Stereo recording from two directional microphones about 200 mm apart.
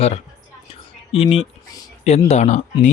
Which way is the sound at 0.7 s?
30° left (ahead or behind).